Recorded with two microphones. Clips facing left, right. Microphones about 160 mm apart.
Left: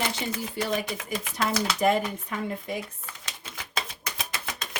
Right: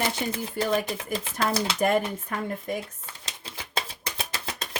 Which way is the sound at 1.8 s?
50° right (ahead or behind).